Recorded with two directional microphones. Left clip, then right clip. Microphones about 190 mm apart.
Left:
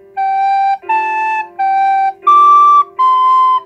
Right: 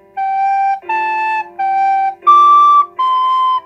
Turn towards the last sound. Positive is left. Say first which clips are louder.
# left 3 dB
turn(degrees=5)  # may be behind; listen again after turning